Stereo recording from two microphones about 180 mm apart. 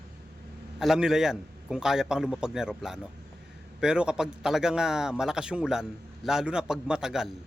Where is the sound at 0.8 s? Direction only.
Centre (ahead or behind).